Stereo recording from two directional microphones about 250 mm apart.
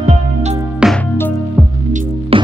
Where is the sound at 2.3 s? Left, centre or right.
Right.